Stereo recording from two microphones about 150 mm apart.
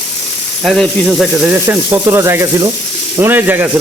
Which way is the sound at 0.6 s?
Centre (ahead or behind).